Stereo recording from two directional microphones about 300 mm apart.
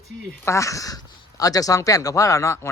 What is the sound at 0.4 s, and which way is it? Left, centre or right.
A man's voice, centre.